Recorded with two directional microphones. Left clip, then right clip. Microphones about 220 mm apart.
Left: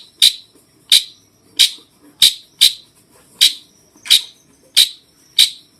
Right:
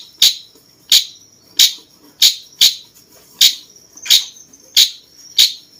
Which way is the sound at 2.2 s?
Centre (ahead or behind).